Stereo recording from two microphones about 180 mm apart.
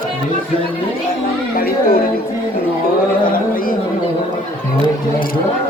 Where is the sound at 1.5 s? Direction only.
55° left (ahead or behind).